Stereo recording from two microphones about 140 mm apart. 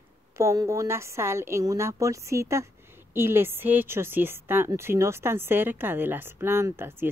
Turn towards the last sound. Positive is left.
turn(degrees=-15)  # may be behind; listen again after turning